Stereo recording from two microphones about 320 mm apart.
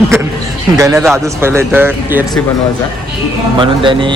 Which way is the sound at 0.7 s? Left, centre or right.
Centre.